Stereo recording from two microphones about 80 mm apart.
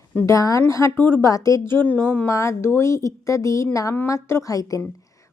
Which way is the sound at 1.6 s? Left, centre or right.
Left.